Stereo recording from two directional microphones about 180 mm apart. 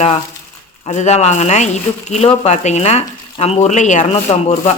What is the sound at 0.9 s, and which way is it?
Speech, 40° left (ahead or behind).